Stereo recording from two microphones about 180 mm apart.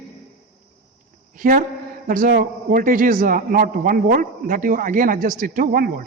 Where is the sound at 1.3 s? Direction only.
50° right (ahead or behind).